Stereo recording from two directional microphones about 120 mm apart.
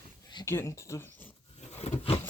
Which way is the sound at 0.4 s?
20° left (ahead or behind).